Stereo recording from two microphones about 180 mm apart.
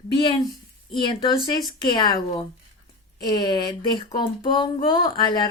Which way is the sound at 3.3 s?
20° left (ahead or behind).